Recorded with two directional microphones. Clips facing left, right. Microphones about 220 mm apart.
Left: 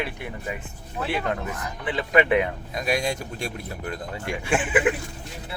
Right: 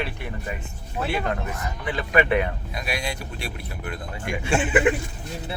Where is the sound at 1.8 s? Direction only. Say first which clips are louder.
Left 1 dB; 20° left (ahead or behind).